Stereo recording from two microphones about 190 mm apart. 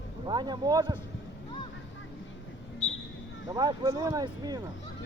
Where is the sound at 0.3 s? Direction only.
25° right (ahead or behind).